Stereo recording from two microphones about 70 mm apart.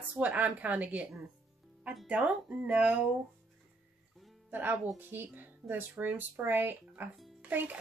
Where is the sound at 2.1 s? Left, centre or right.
Centre.